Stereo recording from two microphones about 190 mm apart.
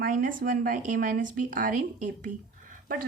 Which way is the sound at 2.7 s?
50° right (ahead or behind).